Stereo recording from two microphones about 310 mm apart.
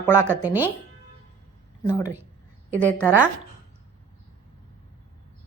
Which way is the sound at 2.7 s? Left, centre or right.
Centre.